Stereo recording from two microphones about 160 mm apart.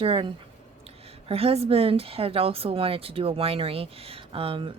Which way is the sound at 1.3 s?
40° right (ahead or behind).